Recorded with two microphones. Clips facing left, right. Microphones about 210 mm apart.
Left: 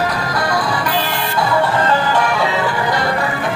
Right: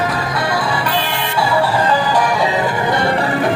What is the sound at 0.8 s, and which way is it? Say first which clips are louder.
Music: even; 5° left (ahead or behind).